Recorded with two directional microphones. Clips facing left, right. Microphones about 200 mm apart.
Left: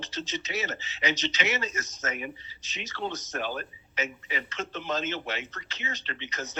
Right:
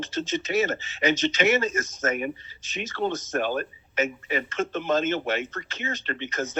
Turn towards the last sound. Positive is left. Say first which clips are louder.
# right 8 dB
turn(degrees=-50)  # may be behind; listen again after turning